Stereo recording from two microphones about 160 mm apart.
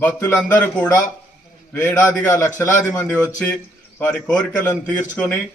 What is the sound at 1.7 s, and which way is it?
A man's voice, 15° left (ahead or behind).